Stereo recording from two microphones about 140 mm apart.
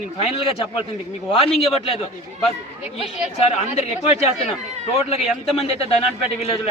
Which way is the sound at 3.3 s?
50° left (ahead or behind).